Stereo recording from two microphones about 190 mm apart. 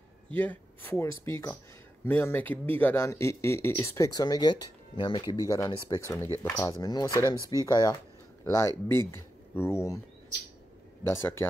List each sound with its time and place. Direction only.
0.4 s speech: 10° left (ahead or behind)
6.7 s speech: 20° left (ahead or behind)
11.1 s speech: 15° left (ahead or behind)